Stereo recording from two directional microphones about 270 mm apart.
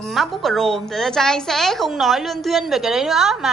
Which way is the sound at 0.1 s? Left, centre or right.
Centre.